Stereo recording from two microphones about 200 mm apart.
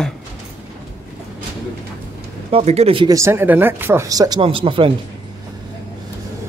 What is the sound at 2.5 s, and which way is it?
Speech, 30° right (ahead or behind).